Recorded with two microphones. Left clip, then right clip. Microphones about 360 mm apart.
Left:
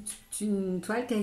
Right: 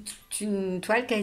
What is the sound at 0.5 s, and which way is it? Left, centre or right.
Speech, right.